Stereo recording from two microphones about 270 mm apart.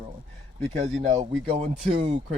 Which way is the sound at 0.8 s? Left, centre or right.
Right.